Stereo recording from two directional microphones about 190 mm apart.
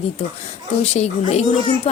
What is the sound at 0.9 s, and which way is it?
Speech, 35° left (ahead or behind).